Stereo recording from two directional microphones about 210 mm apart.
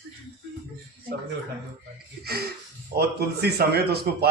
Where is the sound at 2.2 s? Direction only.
45° right (ahead or behind).